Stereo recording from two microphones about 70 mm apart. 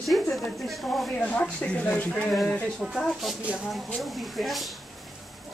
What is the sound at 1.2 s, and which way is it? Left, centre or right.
Speech, centre.